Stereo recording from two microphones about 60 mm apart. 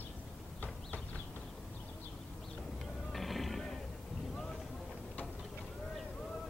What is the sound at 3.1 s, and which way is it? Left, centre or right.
Music, centre.